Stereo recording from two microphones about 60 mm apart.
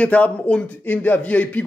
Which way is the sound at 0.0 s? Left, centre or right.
Left.